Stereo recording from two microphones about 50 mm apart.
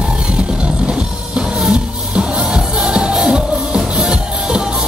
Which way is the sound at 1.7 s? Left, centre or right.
Centre.